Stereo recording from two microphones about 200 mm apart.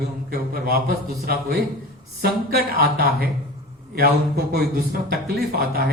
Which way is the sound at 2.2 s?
50° right (ahead or behind).